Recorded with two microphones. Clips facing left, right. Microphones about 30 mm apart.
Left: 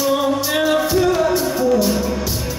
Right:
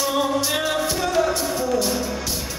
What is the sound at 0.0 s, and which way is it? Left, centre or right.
Music, centre.